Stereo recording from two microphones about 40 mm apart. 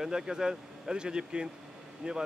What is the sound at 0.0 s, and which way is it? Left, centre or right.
Speech, centre.